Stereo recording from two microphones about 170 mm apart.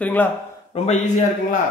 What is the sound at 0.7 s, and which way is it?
Speech, 40° left (ahead or behind).